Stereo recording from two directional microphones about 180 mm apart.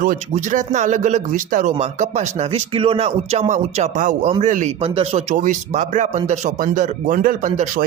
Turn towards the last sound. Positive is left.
turn(degrees=-50)  # may be behind; listen again after turning